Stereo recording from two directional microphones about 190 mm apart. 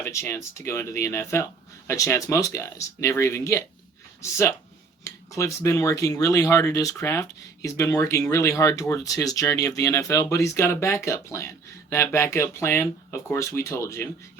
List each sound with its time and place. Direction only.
0.0 s speech: 15° left (ahead or behind)